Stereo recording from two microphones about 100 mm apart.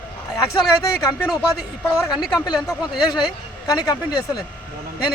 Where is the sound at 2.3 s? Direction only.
45° left (ahead or behind).